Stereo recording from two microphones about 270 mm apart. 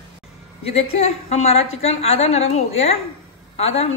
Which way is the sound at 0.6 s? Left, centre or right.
Left.